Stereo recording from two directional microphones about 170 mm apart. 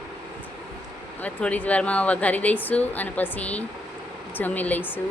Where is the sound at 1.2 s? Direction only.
10° left (ahead or behind).